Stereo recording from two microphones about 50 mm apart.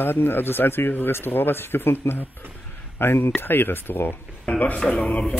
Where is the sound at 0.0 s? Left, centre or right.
Left.